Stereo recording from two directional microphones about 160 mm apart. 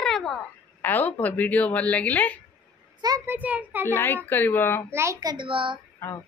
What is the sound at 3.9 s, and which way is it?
Speech, 15° left (ahead or behind).